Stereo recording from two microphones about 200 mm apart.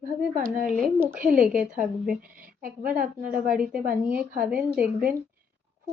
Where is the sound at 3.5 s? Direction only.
5° right (ahead or behind).